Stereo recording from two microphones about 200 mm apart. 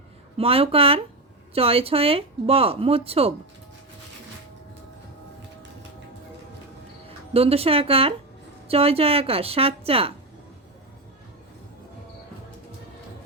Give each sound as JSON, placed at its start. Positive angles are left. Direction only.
{"t": 0.3, "sound": "speech", "side_deg": -30}
{"t": 7.3, "sound": "speech", "side_deg": -30}